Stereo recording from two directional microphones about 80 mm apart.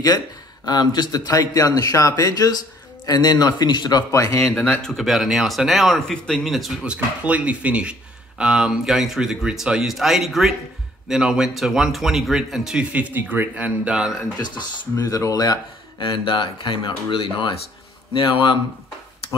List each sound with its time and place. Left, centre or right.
0.7 s a man's voice: left
4.1 s speech: left
4.8 s speech: centre
6.9 s speech: centre
12.9 s speech: right
14.4 s a man's voice: left
15.0 s a man's voice: left
16.0 s speech: left